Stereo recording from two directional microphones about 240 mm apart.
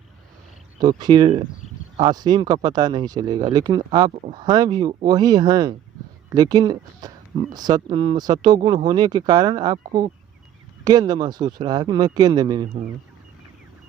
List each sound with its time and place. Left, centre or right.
0.8 s speech: centre
4.1 s speech: right
4.4 s speech: centre
10.8 s speech: centre